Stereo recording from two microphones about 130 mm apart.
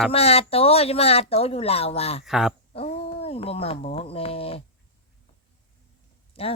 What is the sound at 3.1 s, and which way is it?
Speech, 50° left (ahead or behind).